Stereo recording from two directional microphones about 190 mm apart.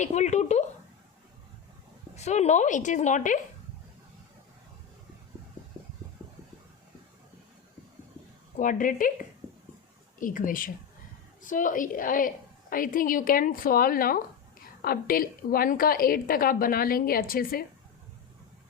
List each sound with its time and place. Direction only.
0.0 s a woman's voice: 40° left (ahead or behind)
2.1 s a woman's voice: 35° left (ahead or behind)
8.5 s a woman's voice: 45° left (ahead or behind)
10.2 s a woman's voice: 45° left (ahead or behind)